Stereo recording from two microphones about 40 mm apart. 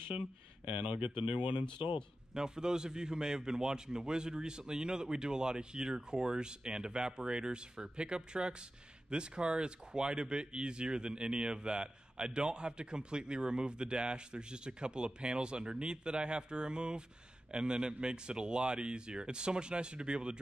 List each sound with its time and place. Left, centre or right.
0.7 s speech: right
2.3 s speech: centre